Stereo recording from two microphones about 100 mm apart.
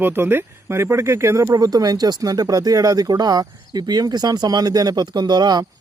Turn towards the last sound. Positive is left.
turn(degrees=-45)  # may be behind; listen again after turning